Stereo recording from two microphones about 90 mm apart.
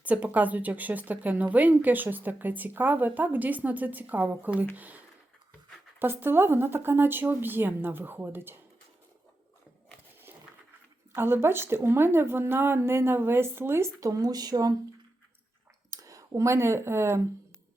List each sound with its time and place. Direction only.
0.0 s a woman's voice: 15° right (ahead or behind)
11.1 s a woman's voice: 25° right (ahead or behind); by 14.8 s 45° right (ahead or behind)
15.9 s speech: 40° right (ahead or behind)